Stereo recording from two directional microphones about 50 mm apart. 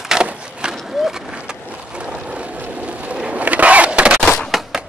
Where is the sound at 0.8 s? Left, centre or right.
Centre.